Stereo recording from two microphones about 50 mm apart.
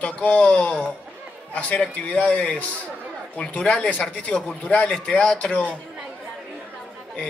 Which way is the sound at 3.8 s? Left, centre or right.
Left.